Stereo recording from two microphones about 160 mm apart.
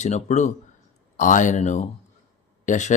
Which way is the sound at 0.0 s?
45° left (ahead or behind).